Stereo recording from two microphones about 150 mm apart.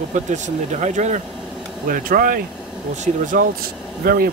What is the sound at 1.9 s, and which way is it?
Speech, 70° right (ahead or behind).